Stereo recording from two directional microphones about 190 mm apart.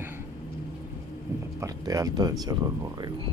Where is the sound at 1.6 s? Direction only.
20° right (ahead or behind).